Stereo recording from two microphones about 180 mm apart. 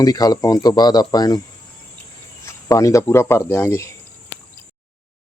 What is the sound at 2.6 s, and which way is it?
Speech, 20° left (ahead or behind).